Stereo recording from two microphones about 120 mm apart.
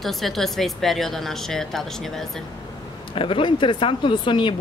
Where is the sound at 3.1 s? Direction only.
45° left (ahead or behind).